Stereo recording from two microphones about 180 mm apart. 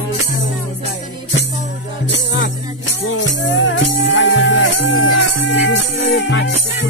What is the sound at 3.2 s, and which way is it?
Music, 90° left.